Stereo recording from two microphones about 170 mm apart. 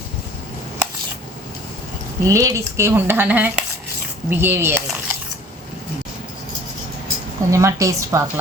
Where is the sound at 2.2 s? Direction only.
20° right (ahead or behind).